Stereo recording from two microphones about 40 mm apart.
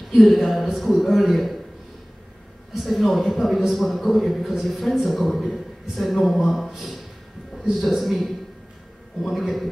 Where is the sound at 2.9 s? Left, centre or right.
Centre.